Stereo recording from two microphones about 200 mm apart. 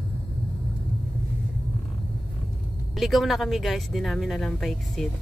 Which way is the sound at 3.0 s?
Centre (ahead or behind).